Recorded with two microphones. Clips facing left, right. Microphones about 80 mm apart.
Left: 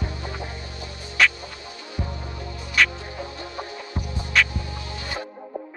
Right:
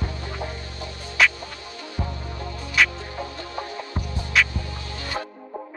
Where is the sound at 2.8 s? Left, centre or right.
Centre.